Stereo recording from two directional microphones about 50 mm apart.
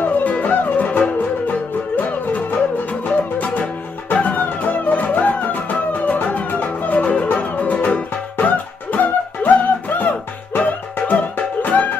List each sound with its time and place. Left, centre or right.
0.0 s music: left